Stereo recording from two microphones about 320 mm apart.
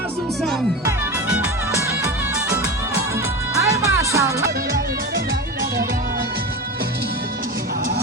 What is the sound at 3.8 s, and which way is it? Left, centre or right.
Music, centre.